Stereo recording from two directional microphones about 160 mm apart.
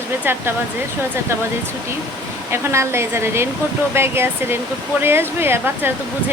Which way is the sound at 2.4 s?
15° right (ahead or behind).